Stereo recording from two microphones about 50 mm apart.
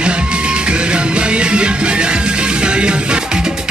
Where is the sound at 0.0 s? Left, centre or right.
Centre.